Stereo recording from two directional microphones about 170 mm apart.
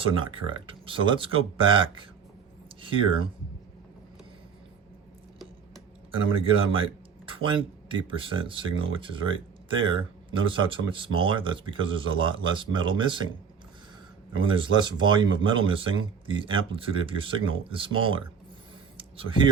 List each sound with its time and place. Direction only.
0.0 s speech: 30° right (ahead or behind)
6.7 s speech: 30° right (ahead or behind)
14.3 s speech: 30° right (ahead or behind)
18.9 s a sound: 30° right (ahead or behind)